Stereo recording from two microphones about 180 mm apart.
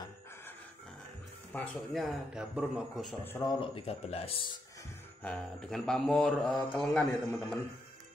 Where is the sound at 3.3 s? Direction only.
15° left (ahead or behind).